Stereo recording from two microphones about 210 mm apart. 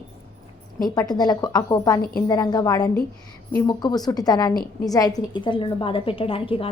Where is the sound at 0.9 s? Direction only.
20° left (ahead or behind).